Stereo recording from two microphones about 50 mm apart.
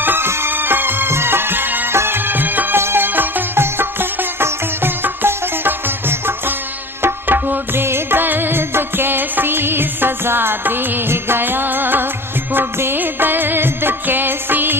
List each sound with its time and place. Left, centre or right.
0.0 s music: right
1.9 s music: right
2.7 s music: right
7.0 s tabla: right
7.9 s music: right